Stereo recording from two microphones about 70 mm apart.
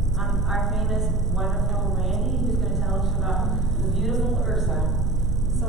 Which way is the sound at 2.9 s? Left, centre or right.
Centre.